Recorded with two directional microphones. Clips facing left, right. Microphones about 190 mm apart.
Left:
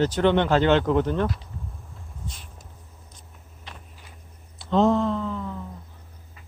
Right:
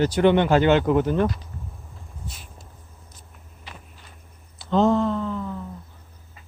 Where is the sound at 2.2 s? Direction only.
5° right (ahead or behind).